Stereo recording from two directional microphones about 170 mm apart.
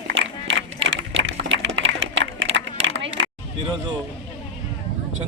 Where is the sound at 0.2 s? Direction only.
90° right.